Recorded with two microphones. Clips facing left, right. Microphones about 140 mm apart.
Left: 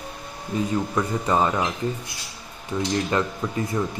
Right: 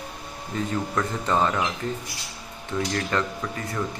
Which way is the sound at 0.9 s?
15° left (ahead or behind).